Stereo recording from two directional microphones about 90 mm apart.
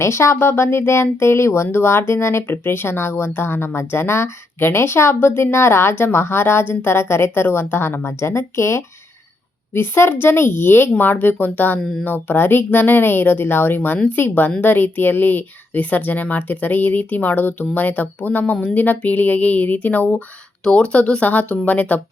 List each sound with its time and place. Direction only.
0.0 s speech: 30° left (ahead or behind)